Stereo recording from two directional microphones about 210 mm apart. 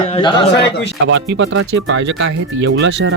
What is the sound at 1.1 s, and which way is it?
Speech, 60° right (ahead or behind).